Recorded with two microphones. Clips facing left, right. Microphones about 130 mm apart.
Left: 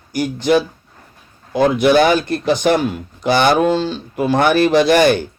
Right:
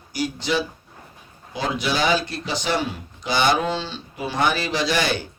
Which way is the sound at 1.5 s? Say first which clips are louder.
Left 12 dB; 55° left (ahead or behind).